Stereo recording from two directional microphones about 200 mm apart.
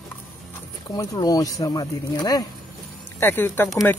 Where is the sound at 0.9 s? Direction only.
20° left (ahead or behind).